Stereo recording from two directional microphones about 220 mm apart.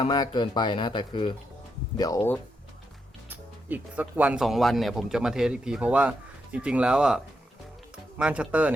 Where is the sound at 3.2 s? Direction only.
5° right (ahead or behind).